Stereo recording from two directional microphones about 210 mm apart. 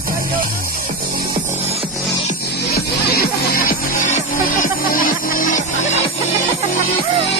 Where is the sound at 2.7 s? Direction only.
50° left (ahead or behind).